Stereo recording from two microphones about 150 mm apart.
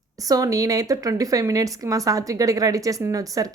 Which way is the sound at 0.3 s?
25° right (ahead or behind).